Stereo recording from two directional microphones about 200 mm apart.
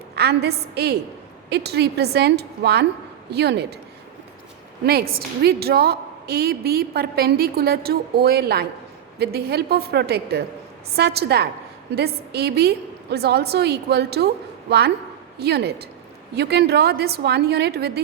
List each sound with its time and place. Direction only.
0.2 s a woman's voice: 55° right (ahead or behind)
4.9 s a woman's voice: 50° right (ahead or behind)